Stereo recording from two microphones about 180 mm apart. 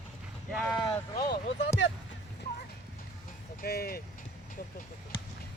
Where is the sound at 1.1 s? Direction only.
20° left (ahead or behind).